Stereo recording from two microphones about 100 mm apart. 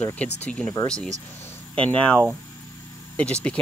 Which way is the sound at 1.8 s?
15° left (ahead or behind).